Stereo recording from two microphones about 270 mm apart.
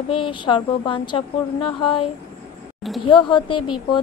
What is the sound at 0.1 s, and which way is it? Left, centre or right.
A woman's voice, centre.